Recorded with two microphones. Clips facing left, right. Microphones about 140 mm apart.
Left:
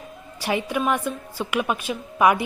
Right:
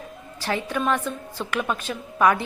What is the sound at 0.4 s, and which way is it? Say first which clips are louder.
A woman's voice: left 1 dB; 10° left (ahead or behind).